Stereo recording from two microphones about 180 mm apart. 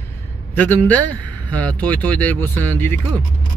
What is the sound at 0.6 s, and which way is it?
Speech, 10° left (ahead or behind).